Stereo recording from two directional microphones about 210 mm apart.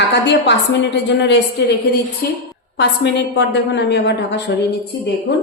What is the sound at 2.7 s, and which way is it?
A woman's voice, 55° left (ahead or behind).